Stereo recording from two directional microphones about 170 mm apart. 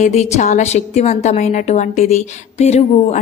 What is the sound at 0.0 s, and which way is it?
A woman's voice, 40° left (ahead or behind).